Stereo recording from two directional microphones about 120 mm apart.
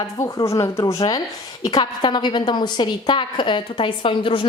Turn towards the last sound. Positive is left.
turn(degrees=45)  # may be behind; listen again after turning